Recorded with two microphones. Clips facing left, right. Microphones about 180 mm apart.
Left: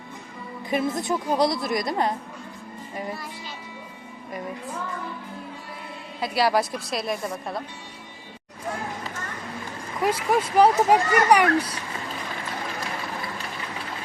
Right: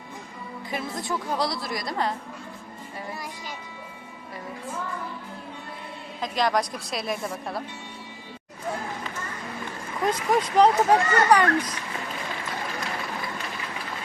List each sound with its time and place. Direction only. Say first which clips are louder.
0.7 s a woman's voice: left 6 dB; 20° left (ahead or behind)
6.1 s a woman's voice: left 2 dB; 10° left (ahead or behind)
10.0 s speech: left 1 dB; 10° left (ahead or behind)